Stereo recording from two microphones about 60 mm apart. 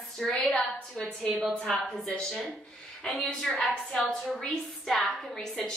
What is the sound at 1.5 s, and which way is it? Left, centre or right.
A woman's voice, centre.